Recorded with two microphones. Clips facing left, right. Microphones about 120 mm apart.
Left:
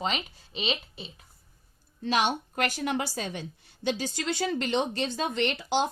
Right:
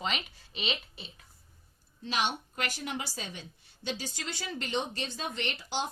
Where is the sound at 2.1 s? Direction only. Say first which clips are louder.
Left 6 dB; 50° left (ahead or behind).